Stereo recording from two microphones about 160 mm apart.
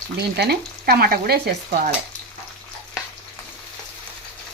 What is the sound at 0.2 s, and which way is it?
Stir, 90° right.